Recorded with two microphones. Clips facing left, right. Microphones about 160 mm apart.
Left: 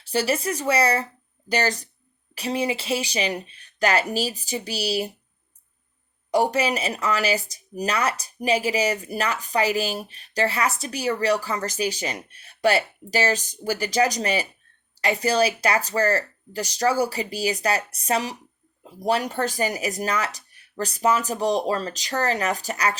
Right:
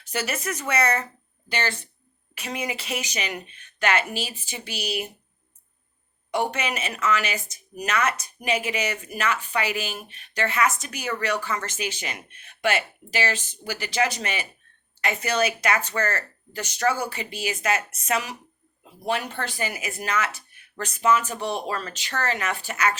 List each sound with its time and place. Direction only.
0.0 s speech: 30° left (ahead or behind)
6.3 s speech: 35° left (ahead or behind)